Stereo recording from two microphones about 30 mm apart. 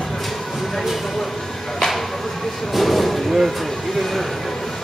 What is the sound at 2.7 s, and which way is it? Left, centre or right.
Speech, centre.